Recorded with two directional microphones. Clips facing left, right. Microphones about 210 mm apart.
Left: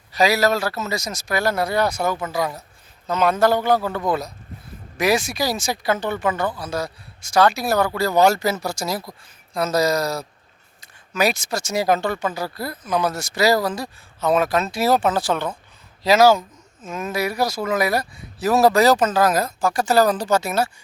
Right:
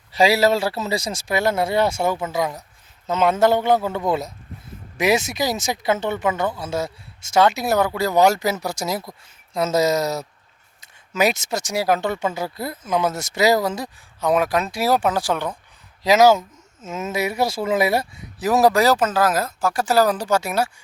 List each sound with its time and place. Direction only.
0.1 s speech: 25° right (ahead or behind)
10.8 s a sound: 20° right (ahead or behind)
11.7 s speech: 10° right (ahead or behind)
12.0 s speech: 20° right (ahead or behind)